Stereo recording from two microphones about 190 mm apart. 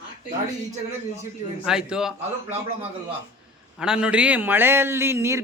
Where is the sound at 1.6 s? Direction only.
5° right (ahead or behind).